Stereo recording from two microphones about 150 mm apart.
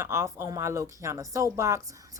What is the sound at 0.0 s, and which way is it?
A woman's voice, 15° right (ahead or behind).